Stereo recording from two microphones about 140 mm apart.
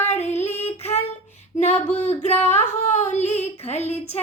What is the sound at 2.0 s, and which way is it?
Speech, 50° left (ahead or behind).